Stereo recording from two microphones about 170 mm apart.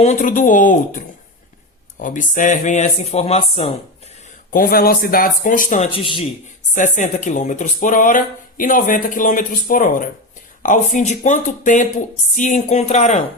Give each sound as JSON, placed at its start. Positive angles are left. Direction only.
{"t": 0.0, "sound": "speech", "side_deg": 45}
{"t": 4.5, "sound": "a man's voice", "side_deg": 60}
{"t": 5.9, "sound": "speech", "side_deg": 30}
{"t": 6.7, "sound": "speech", "side_deg": 45}
{"t": 10.9, "sound": "speech", "side_deg": 45}